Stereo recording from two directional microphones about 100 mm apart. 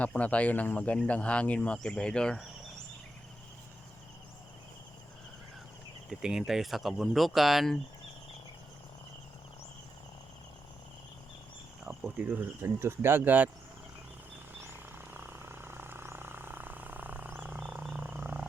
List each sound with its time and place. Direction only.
0.0 s speech: 15° left (ahead or behind)
6.1 s speech: 5° right (ahead or behind)
11.9 s cricket: 10° right (ahead or behind)
12.3 s speech: 20° right (ahead or behind)
14.6 s vehicle: 20° right (ahead or behind)
18.0 s wild animals: 20° right (ahead or behind)